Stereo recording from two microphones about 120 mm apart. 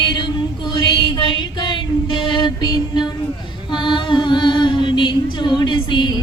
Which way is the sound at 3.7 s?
40° left (ahead or behind).